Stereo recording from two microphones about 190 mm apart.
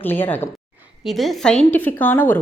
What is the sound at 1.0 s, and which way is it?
A woman's voice, centre (ahead or behind).